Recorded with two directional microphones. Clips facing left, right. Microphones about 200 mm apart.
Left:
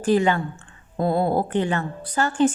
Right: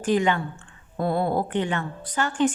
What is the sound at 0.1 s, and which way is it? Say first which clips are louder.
Speech: left 3 dB; 35° left (ahead or behind).